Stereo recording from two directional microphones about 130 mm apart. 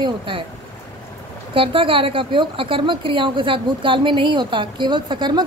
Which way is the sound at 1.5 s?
40° right (ahead or behind).